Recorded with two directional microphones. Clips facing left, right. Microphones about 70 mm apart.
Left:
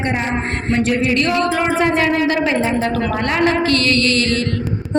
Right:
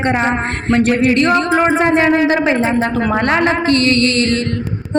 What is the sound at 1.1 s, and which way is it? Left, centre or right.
Speech, right.